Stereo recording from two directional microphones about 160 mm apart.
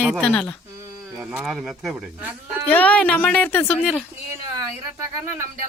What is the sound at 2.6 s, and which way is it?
Speech, 10° left (ahead or behind).